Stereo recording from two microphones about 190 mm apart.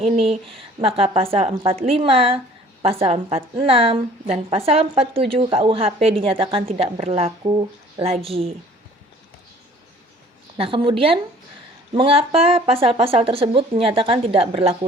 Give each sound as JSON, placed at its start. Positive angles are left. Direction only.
{"t": 0.0, "sound": "a woman's voice", "side_deg": -30}
{"t": 10.6, "sound": "a woman's voice", "side_deg": -30}